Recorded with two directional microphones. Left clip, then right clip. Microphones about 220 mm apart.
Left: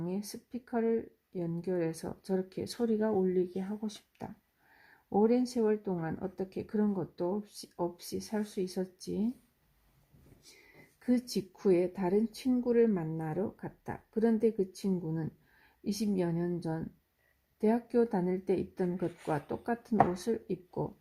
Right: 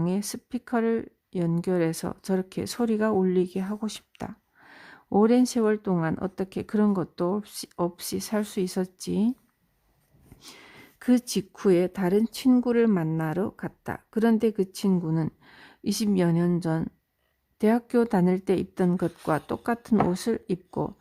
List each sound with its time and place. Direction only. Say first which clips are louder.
0.0 s speech: right 9 dB; 30° right (ahead or behind)
11.0 s speech: right 7 dB; 30° right (ahead or behind)